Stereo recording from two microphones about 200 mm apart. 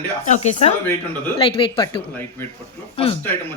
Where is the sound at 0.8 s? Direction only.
10° left (ahead or behind).